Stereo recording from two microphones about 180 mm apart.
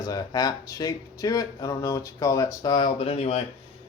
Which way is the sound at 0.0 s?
20° left (ahead or behind).